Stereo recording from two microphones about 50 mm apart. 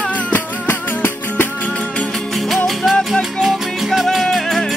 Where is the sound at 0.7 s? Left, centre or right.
Left.